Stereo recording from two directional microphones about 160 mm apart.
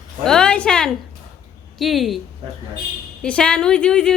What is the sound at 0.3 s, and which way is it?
A woman's voice, 5° left (ahead or behind).